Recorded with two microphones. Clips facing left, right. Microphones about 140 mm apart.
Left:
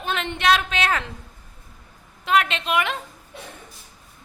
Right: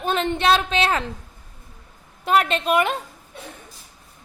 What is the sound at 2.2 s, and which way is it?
Speech, 40° right (ahead or behind).